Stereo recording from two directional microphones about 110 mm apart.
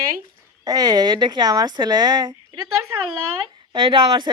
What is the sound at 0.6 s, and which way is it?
Speech, 35° right (ahead or behind).